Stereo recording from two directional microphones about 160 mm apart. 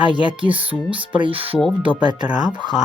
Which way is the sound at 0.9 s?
30° right (ahead or behind).